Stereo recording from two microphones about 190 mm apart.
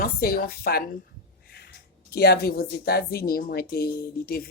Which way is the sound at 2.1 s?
55° left (ahead or behind).